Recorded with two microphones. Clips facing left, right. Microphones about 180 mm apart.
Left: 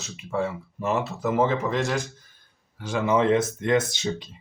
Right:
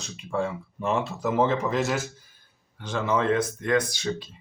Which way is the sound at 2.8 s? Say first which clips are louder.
Left 3 dB; 10° left (ahead or behind).